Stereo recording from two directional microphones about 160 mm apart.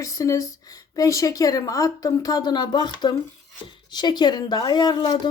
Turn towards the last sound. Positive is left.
turn(degrees=30)  # may be behind; listen again after turning